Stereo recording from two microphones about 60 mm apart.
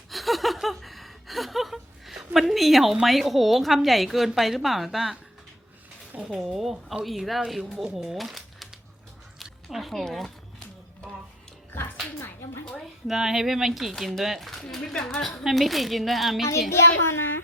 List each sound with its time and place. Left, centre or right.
0.1 s a sound: centre
6.2 s speech: centre
7.9 s shuffling cards: centre
9.4 s music: centre
11.7 s music: left
13.1 s a woman's voice: centre
16.7 s a child's voice: left